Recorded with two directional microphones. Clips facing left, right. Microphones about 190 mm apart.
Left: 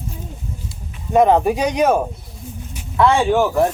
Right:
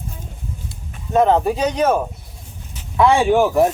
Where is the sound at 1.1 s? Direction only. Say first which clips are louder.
Left 2 dB; 15° left (ahead or behind).